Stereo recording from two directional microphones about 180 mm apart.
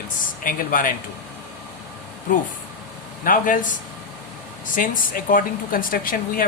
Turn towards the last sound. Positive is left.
turn(degrees=50)  # may be behind; listen again after turning